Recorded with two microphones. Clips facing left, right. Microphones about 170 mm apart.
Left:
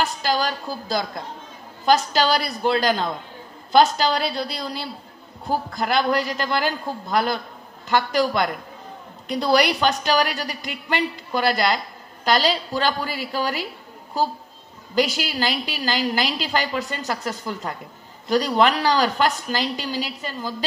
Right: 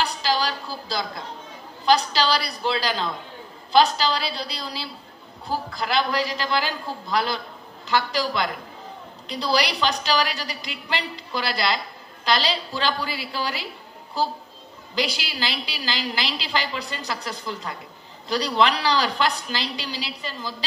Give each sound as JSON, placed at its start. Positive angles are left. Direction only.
{"t": 0.0, "sound": "a sound", "side_deg": 50}
{"t": 1.9, "sound": "a woman's voice", "side_deg": 50}
{"t": 15.0, "sound": "a woman's voice", "side_deg": 45}